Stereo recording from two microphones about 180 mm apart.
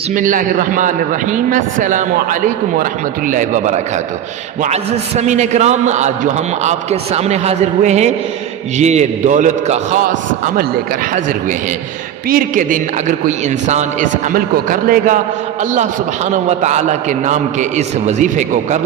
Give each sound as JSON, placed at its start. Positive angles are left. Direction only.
{"t": 0.1, "sound": "a man's voice", "side_deg": -50}
{"t": 12.3, "sound": "a man's voice", "side_deg": -50}